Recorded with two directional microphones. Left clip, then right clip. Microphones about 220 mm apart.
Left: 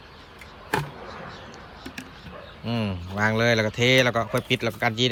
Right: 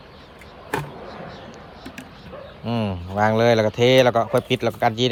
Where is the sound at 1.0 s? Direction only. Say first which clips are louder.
Right 2 dB; 45° right (ahead or behind).